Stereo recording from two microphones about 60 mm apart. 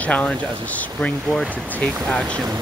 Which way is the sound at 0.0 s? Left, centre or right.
Left.